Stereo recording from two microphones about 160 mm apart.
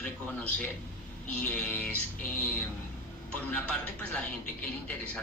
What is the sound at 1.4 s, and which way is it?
Music, 10° left (ahead or behind).